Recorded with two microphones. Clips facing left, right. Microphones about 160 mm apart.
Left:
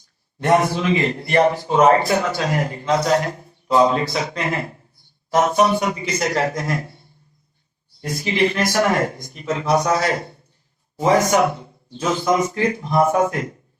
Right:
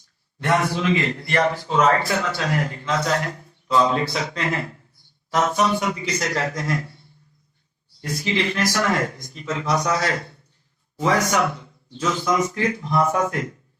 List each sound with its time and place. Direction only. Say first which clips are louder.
0.3 s a man's voice: left 4 dB; 20° left (ahead or behind)
8.0 s a man's voice: left 4 dB; 15° left (ahead or behind)